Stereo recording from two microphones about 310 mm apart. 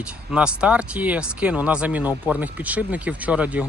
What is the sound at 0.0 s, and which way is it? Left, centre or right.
Speech, centre.